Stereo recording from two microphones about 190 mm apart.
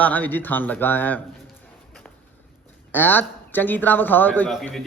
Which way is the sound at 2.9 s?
10° left (ahead or behind).